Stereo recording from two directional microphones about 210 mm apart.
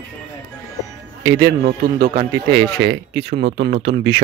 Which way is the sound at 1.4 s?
50° right (ahead or behind).